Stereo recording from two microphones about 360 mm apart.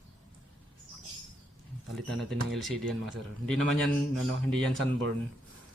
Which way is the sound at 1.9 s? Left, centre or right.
Centre.